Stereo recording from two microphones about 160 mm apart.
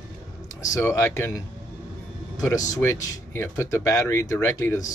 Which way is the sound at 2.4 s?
20° left (ahead or behind).